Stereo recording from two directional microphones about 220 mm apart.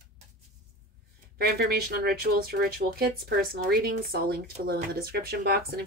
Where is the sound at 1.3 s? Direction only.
45° right (ahead or behind).